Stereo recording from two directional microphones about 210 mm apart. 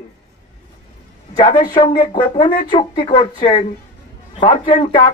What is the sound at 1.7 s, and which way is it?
Speech, 20° left (ahead or behind).